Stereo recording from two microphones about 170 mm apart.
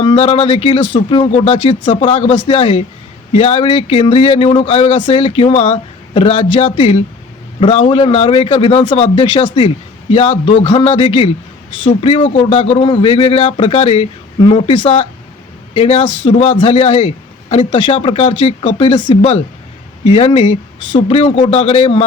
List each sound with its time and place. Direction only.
0.0 s a man's voice: 30° left (ahead or behind)